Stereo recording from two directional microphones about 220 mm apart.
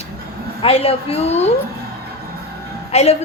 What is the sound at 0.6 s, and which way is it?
Speech, 25° left (ahead or behind).